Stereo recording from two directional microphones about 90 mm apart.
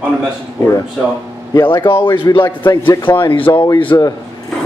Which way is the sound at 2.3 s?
55° left (ahead or behind).